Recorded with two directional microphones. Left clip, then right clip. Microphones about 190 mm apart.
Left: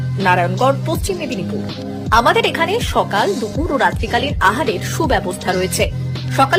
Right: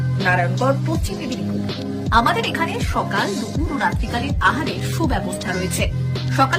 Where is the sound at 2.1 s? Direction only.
20° left (ahead or behind).